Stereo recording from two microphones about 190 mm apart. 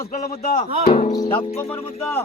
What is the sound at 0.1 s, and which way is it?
Speech, 45° left (ahead or behind).